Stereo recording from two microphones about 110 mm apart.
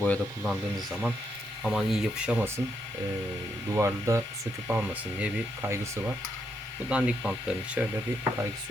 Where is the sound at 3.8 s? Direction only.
25° right (ahead or behind).